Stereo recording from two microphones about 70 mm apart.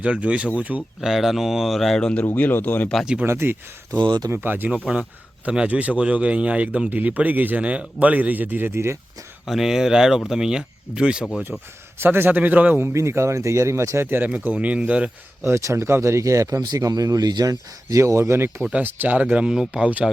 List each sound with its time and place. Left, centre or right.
0.0 s speech: centre
0.8 s speech: centre
2.0 s speech: centre
2.3 s speech: left
3.2 s speech: right
5.5 s speech: centre; by 9.0 s right
9.5 s speech: centre
11.9 s speech: right
12.8 s speech: right
14.3 s speech: centre
15.4 s speech: right
18.7 s speech: right